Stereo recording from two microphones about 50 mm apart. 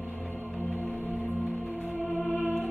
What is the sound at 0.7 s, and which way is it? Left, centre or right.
Music, right.